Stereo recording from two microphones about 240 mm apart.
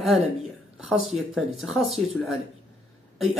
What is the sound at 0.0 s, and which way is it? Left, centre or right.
A woman's voice, centre.